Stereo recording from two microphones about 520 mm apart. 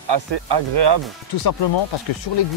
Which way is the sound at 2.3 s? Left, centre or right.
Left.